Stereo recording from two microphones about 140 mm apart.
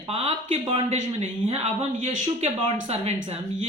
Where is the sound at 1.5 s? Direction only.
50° right (ahead or behind).